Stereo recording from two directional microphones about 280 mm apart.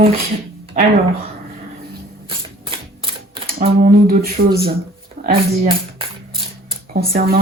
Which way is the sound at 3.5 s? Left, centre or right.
Right.